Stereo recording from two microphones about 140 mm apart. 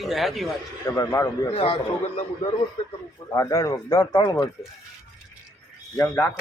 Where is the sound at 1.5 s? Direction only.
45° left (ahead or behind).